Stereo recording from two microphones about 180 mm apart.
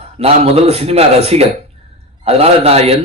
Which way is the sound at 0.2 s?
35° right (ahead or behind).